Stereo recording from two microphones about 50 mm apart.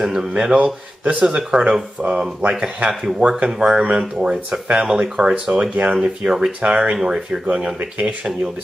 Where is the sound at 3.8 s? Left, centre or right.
Right.